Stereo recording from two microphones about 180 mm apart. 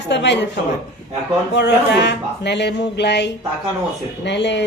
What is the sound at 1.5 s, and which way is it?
A man's voice, 70° left (ahead or behind).